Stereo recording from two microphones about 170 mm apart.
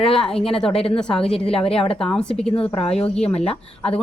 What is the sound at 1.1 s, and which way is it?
Speech, 35° left (ahead or behind).